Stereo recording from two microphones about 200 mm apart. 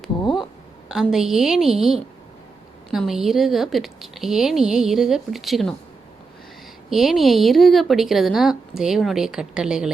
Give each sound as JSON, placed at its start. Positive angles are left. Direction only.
{"t": 0.9, "sound": "speech", "side_deg": 0}
{"t": 6.9, "sound": "speech", "side_deg": 0}